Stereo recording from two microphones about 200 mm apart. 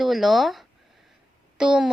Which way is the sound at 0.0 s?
Centre (ahead or behind).